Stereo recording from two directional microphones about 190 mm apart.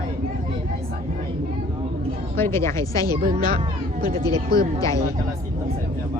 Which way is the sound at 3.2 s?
50° right (ahead or behind).